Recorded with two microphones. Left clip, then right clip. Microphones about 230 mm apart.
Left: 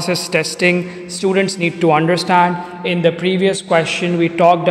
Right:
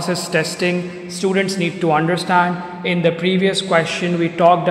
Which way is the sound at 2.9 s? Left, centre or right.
Centre.